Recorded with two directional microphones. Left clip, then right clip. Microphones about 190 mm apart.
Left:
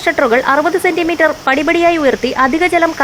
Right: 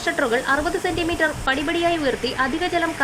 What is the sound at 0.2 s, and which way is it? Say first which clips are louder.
Speech: left 9 dB; 30° left (ahead or behind).